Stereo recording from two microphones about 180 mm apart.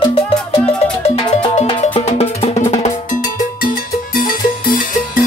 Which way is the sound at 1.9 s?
35° left (ahead or behind).